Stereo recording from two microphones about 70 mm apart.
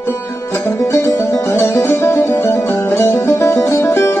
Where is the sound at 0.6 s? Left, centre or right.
Left.